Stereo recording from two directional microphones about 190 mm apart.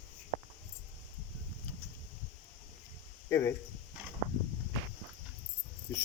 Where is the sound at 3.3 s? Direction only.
15° left (ahead or behind).